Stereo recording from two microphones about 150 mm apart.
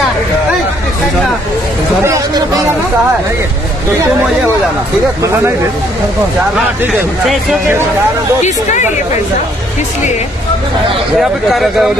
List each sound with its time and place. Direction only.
2.0 s a sound: 20° right (ahead or behind)
8.4 s speech: 55° left (ahead or behind)
11.1 s a man's voice: centre (ahead or behind)